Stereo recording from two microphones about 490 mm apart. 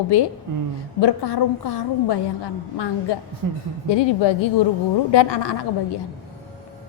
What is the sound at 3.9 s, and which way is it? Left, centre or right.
A woman's voice, left.